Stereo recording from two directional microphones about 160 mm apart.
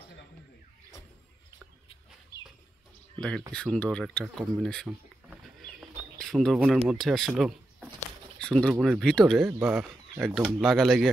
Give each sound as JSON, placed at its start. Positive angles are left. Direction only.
{"t": 3.2, "sound": "speech", "side_deg": 5}
{"t": 4.2, "sound": "bird", "side_deg": 0}
{"t": 6.9, "sound": "speech", "side_deg": 0}
{"t": 8.4, "sound": "a sound", "side_deg": 5}
{"t": 8.8, "sound": "speech", "side_deg": 5}
{"t": 9.5, "sound": "speech", "side_deg": -10}